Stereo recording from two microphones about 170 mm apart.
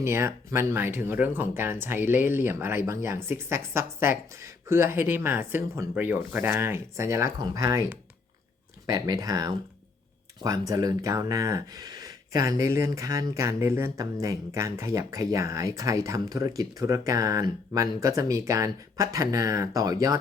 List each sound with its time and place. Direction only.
0.0 s speech: 15° right (ahead or behind)
10.7 s speech: 20° right (ahead or behind)